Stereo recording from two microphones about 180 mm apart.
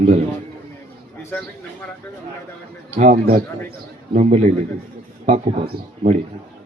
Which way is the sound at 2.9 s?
45° right (ahead or behind).